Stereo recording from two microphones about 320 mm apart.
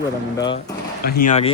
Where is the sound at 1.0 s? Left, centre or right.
Left.